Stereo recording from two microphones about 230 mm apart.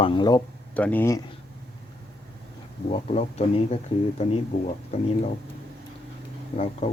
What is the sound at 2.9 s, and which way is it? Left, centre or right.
Speech, left.